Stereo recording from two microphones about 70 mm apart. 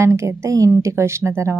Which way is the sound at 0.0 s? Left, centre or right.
Right.